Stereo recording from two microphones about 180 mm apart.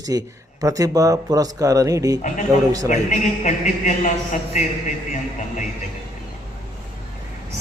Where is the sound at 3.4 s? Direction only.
45° left (ahead or behind).